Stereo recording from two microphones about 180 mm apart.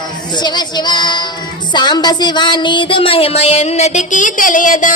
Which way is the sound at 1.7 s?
25° left (ahead or behind).